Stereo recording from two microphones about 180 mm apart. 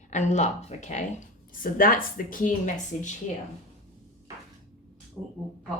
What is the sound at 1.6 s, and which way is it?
A woman's voice, 50° left (ahead or behind).